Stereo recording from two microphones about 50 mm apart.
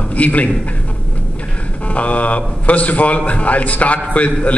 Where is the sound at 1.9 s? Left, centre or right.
Left.